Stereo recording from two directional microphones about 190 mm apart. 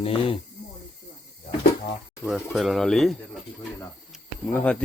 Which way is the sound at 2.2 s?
Centre (ahead or behind).